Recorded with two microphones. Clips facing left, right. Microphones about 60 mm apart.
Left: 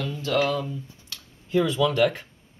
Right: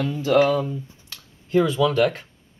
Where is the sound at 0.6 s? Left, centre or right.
Centre.